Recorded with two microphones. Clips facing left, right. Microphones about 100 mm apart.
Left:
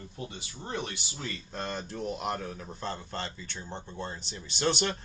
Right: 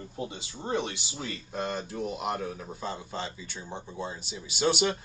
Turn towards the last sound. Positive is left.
turn(degrees=-10)  # may be behind; listen again after turning